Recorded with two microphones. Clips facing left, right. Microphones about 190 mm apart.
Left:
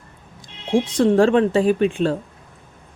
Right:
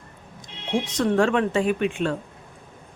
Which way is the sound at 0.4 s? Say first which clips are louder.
Left 6 dB; 30° left (ahead or behind).